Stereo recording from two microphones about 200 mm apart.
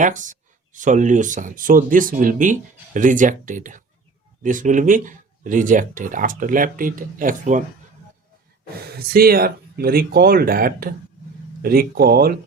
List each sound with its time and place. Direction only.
0.0 s speech: 40° right (ahead or behind)
9.0 s speech: 50° right (ahead or behind)